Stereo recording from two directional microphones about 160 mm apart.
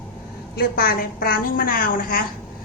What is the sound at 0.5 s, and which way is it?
A woman's voice, 70° left (ahead or behind).